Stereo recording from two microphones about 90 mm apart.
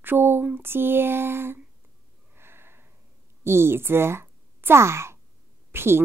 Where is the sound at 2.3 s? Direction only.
25° right (ahead or behind).